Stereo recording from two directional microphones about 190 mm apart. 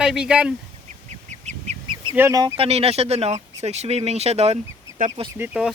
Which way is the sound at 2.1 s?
15° right (ahead or behind).